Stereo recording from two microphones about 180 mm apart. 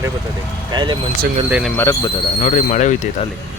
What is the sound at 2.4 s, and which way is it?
Speech, 40° left (ahead or behind).